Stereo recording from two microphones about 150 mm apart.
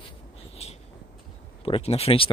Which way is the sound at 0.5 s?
45° left (ahead or behind).